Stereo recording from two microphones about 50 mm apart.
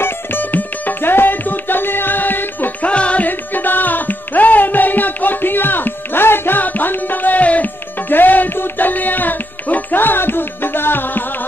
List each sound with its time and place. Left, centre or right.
0.0 s music: left
2.9 s music: left
3.3 s music: left